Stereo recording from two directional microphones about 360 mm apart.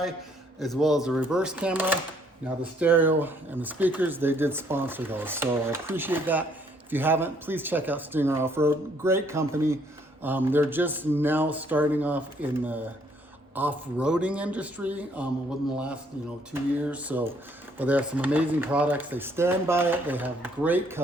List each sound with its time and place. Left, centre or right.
0.6 s speech: centre
16.8 s speech: centre